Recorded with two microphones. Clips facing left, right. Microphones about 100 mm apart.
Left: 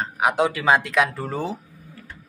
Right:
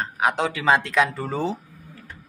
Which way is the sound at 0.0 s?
10° left (ahead or behind).